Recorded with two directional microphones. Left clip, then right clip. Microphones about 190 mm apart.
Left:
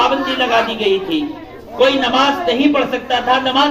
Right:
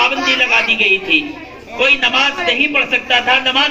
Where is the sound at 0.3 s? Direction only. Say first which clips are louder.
Right 2 dB; 60° left (ahead or behind).